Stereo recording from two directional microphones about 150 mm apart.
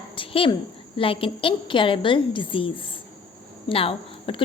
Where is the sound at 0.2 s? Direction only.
35° left (ahead or behind).